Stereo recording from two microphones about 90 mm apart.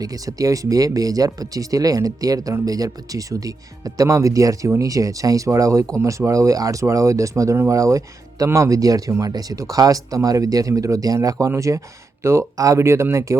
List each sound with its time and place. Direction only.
0.0 s speech: 40° right (ahead or behind)